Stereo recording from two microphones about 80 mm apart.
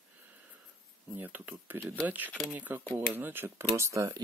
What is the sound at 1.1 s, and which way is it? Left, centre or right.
Speech, right.